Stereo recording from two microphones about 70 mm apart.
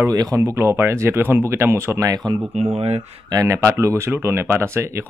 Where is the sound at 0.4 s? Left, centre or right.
Right.